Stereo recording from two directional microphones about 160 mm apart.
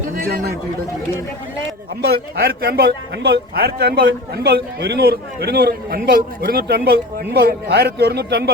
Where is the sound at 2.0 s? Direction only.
70° right (ahead or behind).